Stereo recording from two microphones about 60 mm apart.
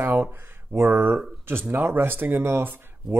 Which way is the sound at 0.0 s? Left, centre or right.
Right.